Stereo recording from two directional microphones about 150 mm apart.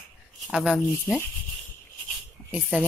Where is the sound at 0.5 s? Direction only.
5° right (ahead or behind).